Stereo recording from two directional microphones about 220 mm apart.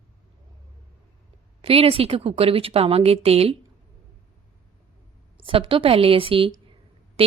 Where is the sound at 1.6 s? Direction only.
25° right (ahead or behind).